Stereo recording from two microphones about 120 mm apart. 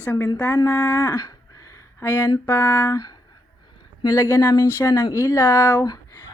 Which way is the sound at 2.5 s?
20° left (ahead or behind).